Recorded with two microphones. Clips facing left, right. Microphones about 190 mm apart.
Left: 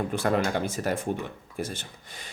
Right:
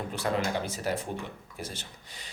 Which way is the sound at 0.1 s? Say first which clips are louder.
Left 1 dB; 55° left (ahead or behind).